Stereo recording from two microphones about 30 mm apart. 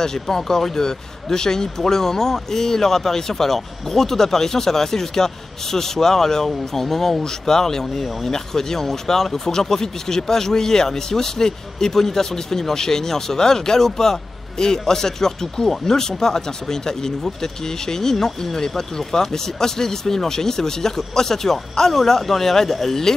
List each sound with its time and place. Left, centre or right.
0.0 s speech: centre